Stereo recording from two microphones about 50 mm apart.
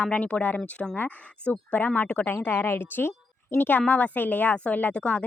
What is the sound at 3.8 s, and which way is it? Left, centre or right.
Speech, left.